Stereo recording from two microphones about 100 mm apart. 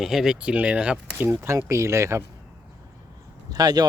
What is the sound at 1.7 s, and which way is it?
Speech, 30° right (ahead or behind).